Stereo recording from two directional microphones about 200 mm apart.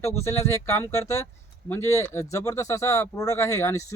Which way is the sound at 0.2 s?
15° left (ahead or behind).